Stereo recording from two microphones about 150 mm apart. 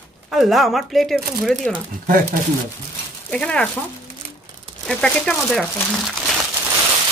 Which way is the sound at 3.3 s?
5° left (ahead or behind).